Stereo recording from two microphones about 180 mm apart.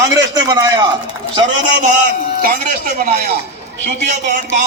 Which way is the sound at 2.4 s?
45° right (ahead or behind).